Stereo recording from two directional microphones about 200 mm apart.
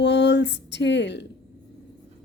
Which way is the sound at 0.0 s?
60° left (ahead or behind).